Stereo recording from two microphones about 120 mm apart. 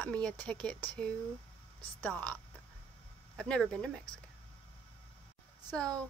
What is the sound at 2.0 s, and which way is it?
Speech, 10° left (ahead or behind).